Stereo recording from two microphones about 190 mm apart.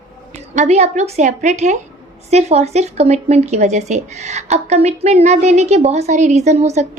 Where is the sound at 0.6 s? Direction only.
35° right (ahead or behind).